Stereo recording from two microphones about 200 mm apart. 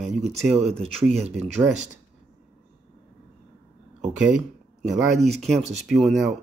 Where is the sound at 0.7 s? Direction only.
Centre (ahead or behind).